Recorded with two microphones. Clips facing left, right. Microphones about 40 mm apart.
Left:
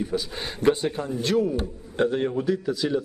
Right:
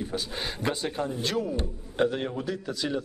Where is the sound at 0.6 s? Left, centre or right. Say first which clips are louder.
Left 10 dB; left.